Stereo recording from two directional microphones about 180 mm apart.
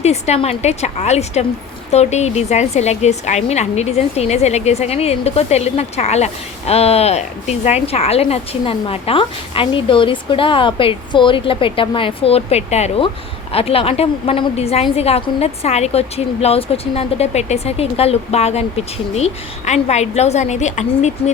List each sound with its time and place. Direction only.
0.0 s a woman's voice: 35° left (ahead or behind)